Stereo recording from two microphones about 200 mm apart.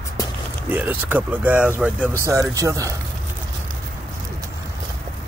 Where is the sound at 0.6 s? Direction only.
10° right (ahead or behind).